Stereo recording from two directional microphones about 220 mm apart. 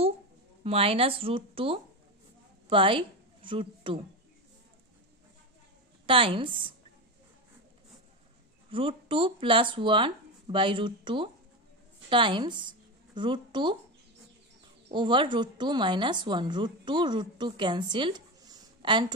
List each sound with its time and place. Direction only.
0.7 s a woman's voice: 25° right (ahead or behind)
6.0 s speech: 25° right (ahead or behind)
8.6 s speech: 25° right (ahead or behind)
14.9 s speech: 20° right (ahead or behind)